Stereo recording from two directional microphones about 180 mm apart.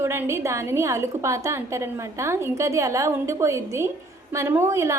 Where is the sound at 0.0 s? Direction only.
15° right (ahead or behind).